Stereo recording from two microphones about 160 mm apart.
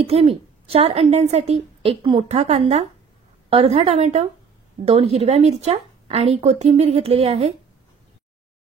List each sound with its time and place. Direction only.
0.0 s a woman's voice: 40° right (ahead or behind)